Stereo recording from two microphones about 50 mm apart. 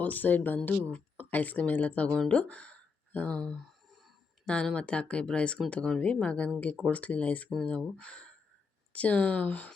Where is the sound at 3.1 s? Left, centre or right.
Left.